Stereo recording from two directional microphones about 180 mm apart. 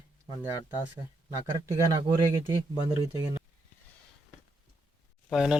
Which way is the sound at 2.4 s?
20° right (ahead or behind).